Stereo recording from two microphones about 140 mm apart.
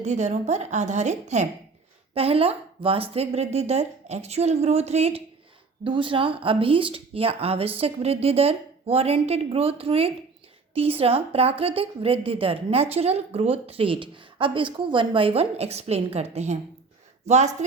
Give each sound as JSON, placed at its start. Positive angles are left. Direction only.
{"t": 0.0, "sound": "a woman's voice", "side_deg": -55}
{"t": 2.1, "sound": "a woman's voice", "side_deg": -45}
{"t": 5.8, "sound": "a woman's voice", "side_deg": -35}